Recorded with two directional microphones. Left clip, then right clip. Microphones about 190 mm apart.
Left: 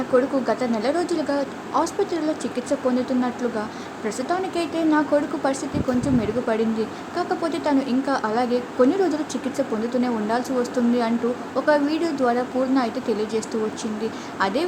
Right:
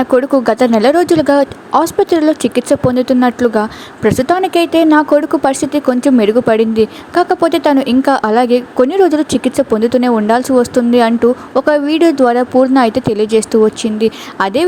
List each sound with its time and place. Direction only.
0.2 s speech: 45° right (ahead or behind)